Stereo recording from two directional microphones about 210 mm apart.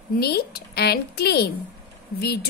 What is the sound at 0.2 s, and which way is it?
A woman's voice, 50° left (ahead or behind).